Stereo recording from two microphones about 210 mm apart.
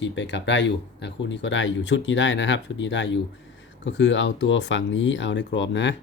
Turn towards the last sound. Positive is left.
turn(degrees=60)  # may be behind; listen again after turning